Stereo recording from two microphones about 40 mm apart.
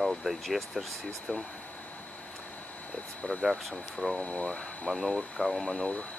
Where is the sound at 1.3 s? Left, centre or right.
Left.